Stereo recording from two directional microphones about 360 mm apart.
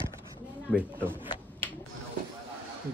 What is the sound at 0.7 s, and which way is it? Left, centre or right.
Speech, centre.